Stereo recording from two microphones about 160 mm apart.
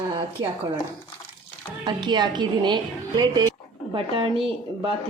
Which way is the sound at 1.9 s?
30° right (ahead or behind).